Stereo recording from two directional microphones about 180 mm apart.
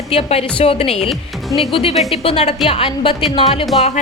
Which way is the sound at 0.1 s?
35° left (ahead or behind).